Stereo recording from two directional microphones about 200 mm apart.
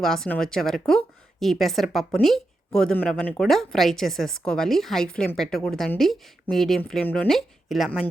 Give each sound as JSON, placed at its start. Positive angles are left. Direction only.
{"t": 0.0, "sound": "speech", "side_deg": 0}